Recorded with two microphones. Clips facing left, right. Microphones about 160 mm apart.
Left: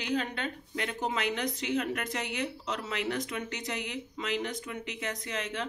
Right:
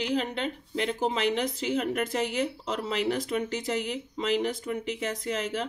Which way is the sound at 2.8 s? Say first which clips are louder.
Right 6 dB; 30° right (ahead or behind).